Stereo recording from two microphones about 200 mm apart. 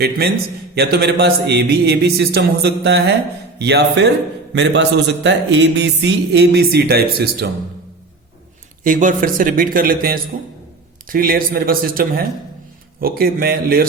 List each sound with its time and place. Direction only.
0.8 s mantra: 55° right (ahead or behind)
8.8 s speech: 40° right (ahead or behind)